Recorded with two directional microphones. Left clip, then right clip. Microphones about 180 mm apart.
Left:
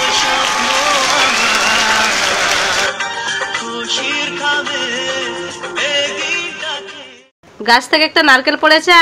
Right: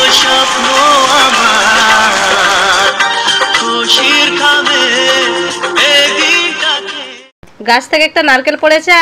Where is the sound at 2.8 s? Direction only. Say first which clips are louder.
Right 8 dB; 35° right (ahead or behind).